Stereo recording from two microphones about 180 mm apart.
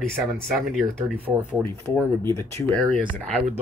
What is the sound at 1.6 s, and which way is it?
Speech, 15° left (ahead or behind).